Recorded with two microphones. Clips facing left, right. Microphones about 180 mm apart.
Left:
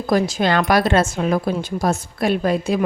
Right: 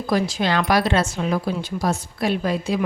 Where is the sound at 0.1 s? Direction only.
45° left (ahead or behind).